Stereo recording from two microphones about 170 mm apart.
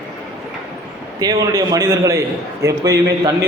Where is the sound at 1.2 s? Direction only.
20° right (ahead or behind).